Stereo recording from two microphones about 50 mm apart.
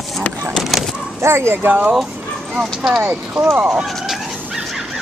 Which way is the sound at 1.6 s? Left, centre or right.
Right.